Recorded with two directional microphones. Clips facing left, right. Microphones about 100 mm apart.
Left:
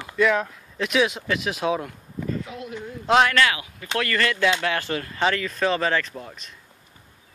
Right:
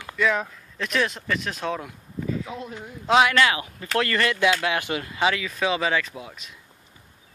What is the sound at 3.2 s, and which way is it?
Speech, 20° right (ahead or behind).